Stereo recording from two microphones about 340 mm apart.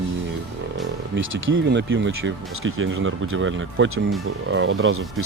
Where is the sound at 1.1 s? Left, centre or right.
Right.